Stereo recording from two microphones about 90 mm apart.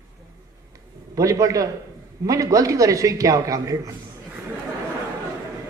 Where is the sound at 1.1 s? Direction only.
35° right (ahead or behind).